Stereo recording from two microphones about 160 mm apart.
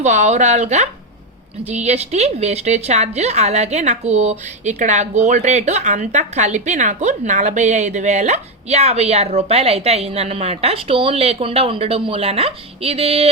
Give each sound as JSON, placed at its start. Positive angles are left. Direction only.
{"t": 0.0, "sound": "a woman's voice", "side_deg": -45}